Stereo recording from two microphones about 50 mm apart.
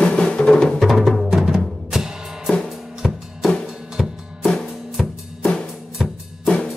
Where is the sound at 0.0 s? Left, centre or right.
Centre.